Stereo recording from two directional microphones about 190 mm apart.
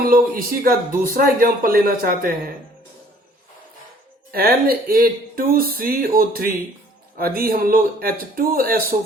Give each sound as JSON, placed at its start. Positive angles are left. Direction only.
{"t": 0.0, "sound": "a man's voice", "side_deg": -50}
{"t": 4.3, "sound": "a man's voice", "side_deg": -55}